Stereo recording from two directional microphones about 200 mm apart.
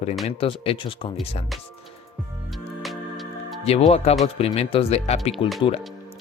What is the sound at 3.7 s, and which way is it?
Speech, 30° left (ahead or behind).